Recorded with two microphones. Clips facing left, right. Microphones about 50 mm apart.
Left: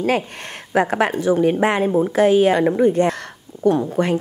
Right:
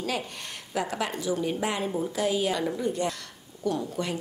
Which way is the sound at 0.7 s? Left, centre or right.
Left.